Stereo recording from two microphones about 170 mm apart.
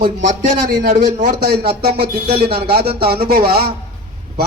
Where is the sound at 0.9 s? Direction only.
55° right (ahead or behind).